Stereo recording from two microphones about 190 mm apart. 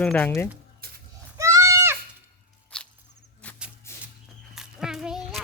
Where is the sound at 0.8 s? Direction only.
55° right (ahead or behind).